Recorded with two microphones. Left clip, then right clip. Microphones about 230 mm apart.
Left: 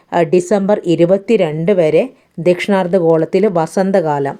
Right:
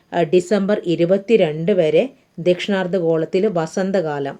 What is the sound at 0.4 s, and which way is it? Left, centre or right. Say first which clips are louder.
A woman's voice: left 5 dB; centre.